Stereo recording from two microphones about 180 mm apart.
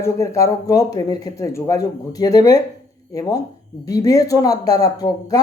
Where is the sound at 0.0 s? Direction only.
15° left (ahead or behind).